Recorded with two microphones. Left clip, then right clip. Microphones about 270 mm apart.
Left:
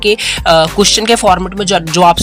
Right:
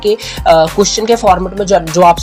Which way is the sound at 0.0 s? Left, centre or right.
Left.